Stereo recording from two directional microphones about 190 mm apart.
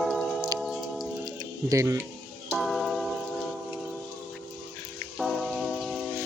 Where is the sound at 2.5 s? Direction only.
Centre (ahead or behind).